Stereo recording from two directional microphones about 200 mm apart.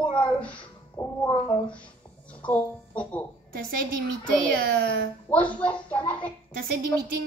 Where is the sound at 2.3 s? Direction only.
5° left (ahead or behind).